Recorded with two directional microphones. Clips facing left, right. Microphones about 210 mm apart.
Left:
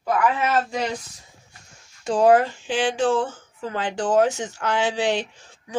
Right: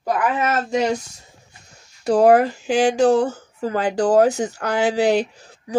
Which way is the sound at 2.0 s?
40° right (ahead or behind).